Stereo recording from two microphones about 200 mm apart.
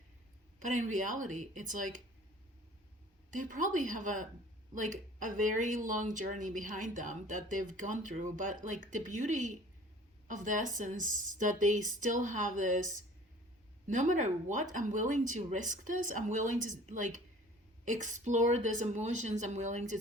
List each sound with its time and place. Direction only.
0.6 s speech: 40° right (ahead or behind)
3.3 s speech: 40° right (ahead or behind)
13.8 s speech: 40° right (ahead or behind)